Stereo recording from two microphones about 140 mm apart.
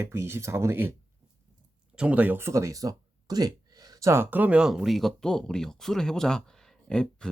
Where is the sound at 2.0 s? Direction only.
10° right (ahead or behind).